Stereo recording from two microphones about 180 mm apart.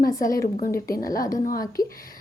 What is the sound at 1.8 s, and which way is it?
Speech, 20° left (ahead or behind).